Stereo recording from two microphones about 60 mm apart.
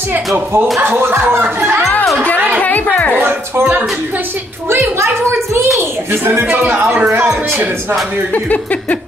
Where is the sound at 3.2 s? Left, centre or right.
Right.